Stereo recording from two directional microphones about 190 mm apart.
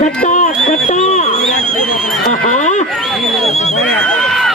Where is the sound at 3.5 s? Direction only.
35° left (ahead or behind).